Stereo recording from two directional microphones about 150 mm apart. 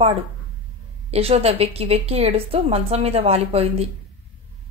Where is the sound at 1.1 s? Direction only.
45° right (ahead or behind).